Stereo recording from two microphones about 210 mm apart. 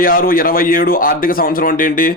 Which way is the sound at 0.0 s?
40° left (ahead or behind).